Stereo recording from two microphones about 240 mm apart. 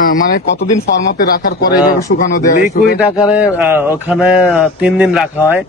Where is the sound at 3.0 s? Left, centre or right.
Centre.